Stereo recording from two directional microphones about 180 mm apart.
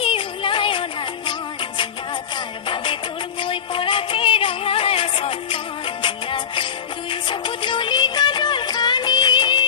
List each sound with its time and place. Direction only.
0.0 s music: 30° left (ahead or behind)
2.6 s music: 30° left (ahead or behind)